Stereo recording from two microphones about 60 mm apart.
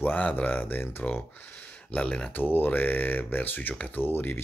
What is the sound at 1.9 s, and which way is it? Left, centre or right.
Speech, centre.